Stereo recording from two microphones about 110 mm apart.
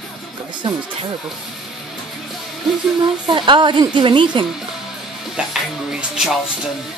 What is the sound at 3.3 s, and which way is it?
Speech, 45° right (ahead or behind).